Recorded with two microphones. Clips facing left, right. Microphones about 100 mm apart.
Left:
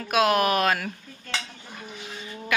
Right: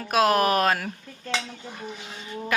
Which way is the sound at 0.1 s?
35° right (ahead or behind).